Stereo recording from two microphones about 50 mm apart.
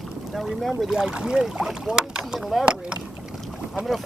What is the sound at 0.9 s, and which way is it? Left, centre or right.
Speech, centre.